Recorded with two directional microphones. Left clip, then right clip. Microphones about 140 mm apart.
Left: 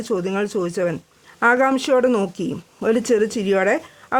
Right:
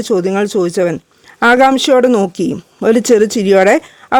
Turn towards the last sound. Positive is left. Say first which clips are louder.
# right 9 dB
turn(degrees=-60)  # may be behind; listen again after turning